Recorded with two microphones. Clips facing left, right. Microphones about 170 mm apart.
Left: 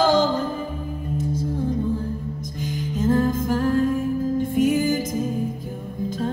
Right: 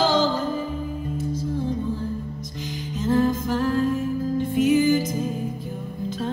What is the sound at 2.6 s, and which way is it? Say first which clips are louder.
Music: left 4 dB; 50° left (ahead or behind).